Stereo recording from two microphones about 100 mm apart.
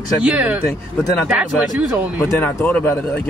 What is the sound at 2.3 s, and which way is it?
Speech, 15° left (ahead or behind).